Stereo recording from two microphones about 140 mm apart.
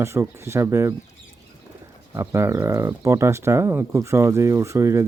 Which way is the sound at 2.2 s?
20° right (ahead or behind).